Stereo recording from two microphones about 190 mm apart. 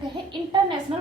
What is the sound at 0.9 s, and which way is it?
Speech, 25° right (ahead or behind).